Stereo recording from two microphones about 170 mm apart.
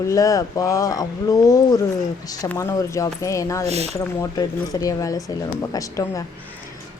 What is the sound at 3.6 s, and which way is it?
Speech, 40° right (ahead or behind).